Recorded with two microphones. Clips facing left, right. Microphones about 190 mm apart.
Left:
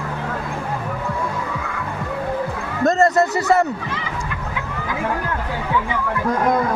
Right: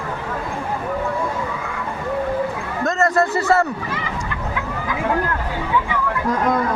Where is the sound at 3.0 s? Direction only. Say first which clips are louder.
Left 1 dB; 20° left (ahead or behind).